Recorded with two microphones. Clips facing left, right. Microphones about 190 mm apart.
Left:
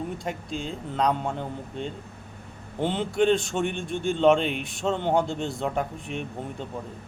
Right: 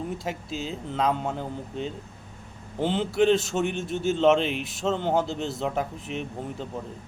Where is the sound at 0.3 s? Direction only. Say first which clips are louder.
Even; 5° right (ahead or behind).